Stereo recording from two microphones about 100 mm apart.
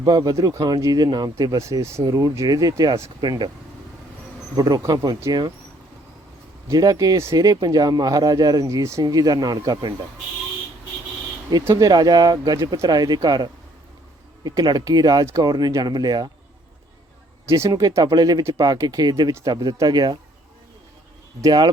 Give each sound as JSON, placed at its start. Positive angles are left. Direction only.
{"t": 0.0, "sound": "speech", "side_deg": -40}
{"t": 3.2, "sound": "speech", "side_deg": -45}
{"t": 4.7, "sound": "speech", "side_deg": -40}
{"t": 6.7, "sound": "speech", "side_deg": -35}
{"t": 11.7, "sound": "speech", "side_deg": -40}
{"t": 17.7, "sound": "speech", "side_deg": -35}
{"t": 21.4, "sound": "speech", "side_deg": -45}